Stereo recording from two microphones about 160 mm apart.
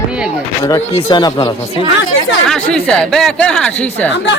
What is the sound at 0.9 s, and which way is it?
Speech, 25° left (ahead or behind).